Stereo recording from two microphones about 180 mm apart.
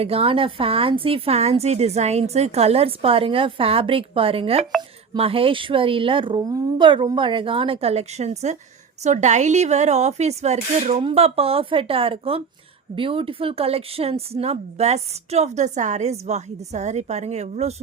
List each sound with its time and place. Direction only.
0.0 s a woman's voice: 35° right (ahead or behind)